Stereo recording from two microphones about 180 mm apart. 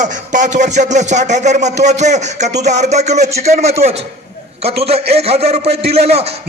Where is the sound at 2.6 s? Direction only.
40° right (ahead or behind).